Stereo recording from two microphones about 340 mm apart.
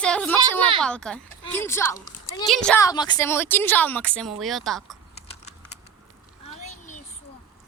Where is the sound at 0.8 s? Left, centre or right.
Centre.